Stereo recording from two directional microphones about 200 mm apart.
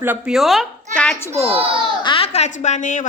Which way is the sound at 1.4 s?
25° right (ahead or behind).